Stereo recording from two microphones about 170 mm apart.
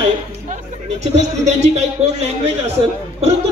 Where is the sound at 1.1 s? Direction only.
40° right (ahead or behind).